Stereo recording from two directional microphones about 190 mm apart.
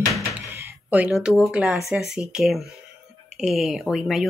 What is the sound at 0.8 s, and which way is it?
Speech, 5° right (ahead or behind).